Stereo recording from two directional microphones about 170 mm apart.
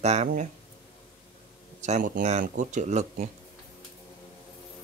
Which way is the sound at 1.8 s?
45° right (ahead or behind).